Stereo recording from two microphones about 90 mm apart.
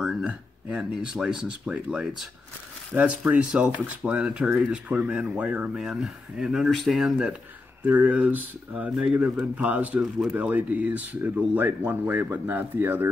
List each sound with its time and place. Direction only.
0.0 s speech: 10° right (ahead or behind)
7.8 s speech: 20° right (ahead or behind)